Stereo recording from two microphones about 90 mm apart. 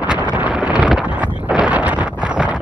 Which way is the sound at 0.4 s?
15° right (ahead or behind).